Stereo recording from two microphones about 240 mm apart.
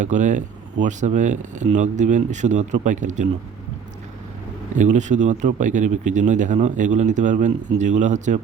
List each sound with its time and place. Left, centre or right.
0.0 s speech: right
4.8 s speech: right